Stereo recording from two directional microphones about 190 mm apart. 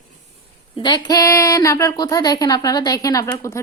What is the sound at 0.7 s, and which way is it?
Speech, 25° left (ahead or behind).